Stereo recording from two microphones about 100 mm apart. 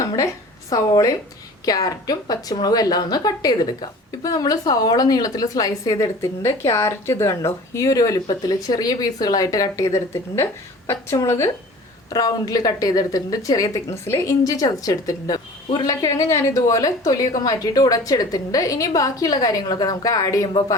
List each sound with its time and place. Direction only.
0.7 s speech: 35° left (ahead or behind)